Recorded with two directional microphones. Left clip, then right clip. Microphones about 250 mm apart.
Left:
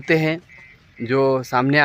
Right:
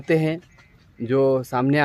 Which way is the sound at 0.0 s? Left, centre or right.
Centre.